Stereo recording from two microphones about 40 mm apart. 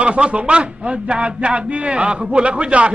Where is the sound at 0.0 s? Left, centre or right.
Right.